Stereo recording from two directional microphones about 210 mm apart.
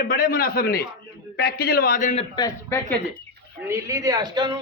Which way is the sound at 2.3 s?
15° left (ahead or behind).